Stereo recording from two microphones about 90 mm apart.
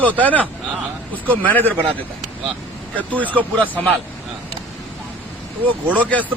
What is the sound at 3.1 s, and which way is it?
Speech, 20° right (ahead or behind).